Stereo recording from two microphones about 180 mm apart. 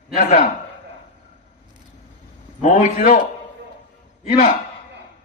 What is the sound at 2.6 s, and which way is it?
Speech, 45° left (ahead or behind).